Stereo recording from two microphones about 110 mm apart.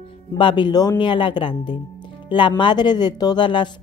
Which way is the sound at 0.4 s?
45° left (ahead or behind).